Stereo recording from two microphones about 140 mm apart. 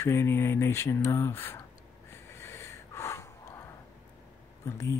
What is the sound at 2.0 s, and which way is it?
Snort, 20° left (ahead or behind).